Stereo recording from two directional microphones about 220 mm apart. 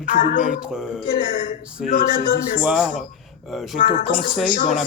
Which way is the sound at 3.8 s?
35° left (ahead or behind).